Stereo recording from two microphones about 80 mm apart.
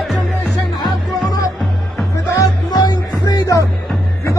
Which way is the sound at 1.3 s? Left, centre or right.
Left.